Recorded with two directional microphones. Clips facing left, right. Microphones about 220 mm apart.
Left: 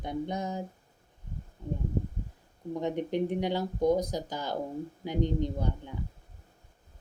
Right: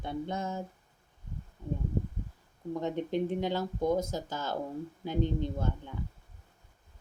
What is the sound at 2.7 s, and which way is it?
Speech, 15° left (ahead or behind).